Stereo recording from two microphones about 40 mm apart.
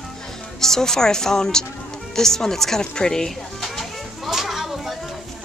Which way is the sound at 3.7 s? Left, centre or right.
Centre.